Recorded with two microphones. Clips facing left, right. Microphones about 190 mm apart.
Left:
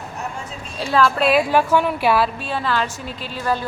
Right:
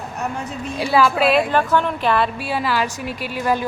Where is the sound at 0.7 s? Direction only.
10° right (ahead or behind).